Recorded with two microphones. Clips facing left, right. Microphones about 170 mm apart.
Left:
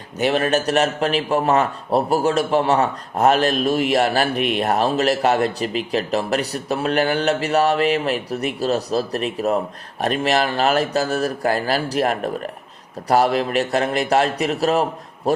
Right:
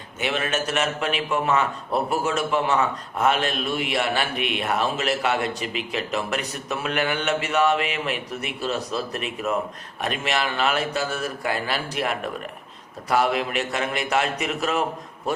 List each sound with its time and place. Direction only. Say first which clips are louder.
0.2 s a man's voice: left 7 dB; 40° left (ahead or behind)